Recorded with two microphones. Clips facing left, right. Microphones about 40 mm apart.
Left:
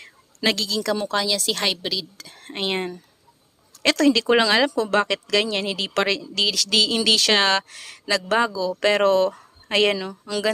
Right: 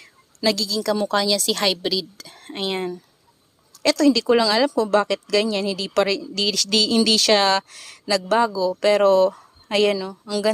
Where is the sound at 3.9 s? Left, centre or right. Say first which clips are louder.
Right 1 dB; left.